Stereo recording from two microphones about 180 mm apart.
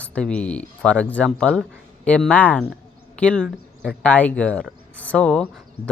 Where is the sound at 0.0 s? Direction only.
5° left (ahead or behind).